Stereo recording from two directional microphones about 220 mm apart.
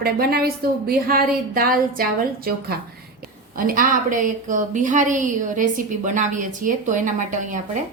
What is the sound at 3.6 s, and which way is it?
A woman's voice, 40° right (ahead or behind).